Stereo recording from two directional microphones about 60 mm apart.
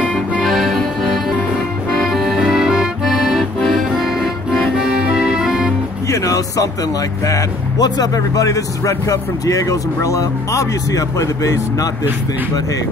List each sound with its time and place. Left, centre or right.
0.4 s music: centre
2.0 s accordion: centre
4.7 s music: centre
6.0 s speech: left